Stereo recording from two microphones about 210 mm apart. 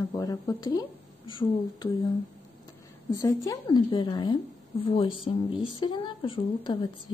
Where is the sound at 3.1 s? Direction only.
15° left (ahead or behind).